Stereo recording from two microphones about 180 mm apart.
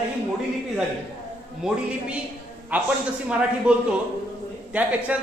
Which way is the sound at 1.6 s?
5° right (ahead or behind).